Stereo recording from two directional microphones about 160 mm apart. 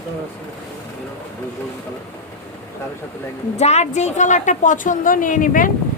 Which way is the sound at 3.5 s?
45° left (ahead or behind).